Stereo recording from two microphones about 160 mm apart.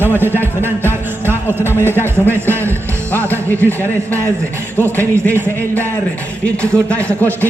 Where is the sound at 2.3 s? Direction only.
15° right (ahead or behind).